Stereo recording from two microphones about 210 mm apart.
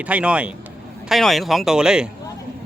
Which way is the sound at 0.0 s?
5° right (ahead or behind).